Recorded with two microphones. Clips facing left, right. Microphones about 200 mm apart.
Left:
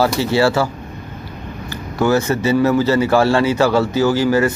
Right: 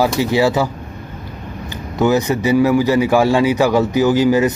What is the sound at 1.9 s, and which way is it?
A man's voice, 15° right (ahead or behind).